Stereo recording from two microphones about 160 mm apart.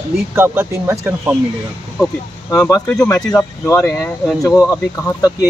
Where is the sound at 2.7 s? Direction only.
20° left (ahead or behind).